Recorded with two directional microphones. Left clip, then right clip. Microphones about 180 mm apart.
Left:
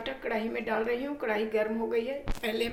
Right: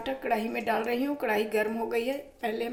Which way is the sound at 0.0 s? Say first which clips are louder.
Right 3 dB; 50° right (ahead or behind).